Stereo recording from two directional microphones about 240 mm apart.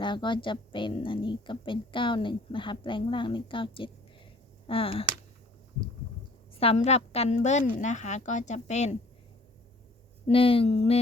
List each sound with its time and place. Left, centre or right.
0.0 s a woman's voice: centre
6.6 s a woman's voice: left
10.2 s a woman's voice: left